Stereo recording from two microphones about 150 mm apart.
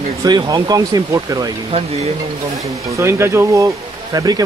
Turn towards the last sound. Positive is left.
turn(degrees=-25)  # may be behind; listen again after turning